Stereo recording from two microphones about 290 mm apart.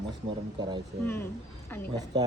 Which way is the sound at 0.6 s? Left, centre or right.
Centre.